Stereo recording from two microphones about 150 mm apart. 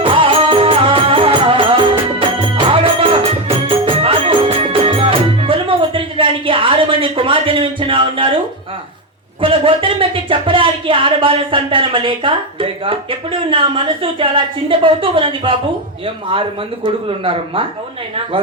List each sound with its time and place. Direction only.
0.0 s music: 35° right (ahead or behind)
9.4 s speech: 35° right (ahead or behind)